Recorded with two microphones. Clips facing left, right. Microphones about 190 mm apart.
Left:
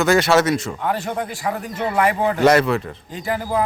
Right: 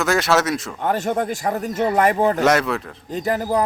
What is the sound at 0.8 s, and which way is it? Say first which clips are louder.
Speech: right 2 dB; 45° right (ahead or behind).